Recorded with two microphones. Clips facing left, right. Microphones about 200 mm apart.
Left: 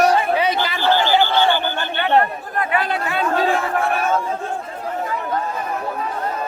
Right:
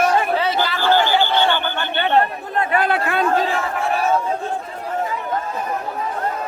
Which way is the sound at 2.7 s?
55° right (ahead or behind).